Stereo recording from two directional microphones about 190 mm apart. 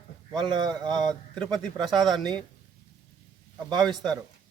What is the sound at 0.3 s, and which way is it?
Speech, 25° right (ahead or behind).